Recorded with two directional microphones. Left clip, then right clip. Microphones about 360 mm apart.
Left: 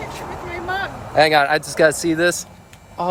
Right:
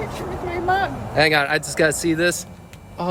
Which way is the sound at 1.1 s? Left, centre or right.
Centre.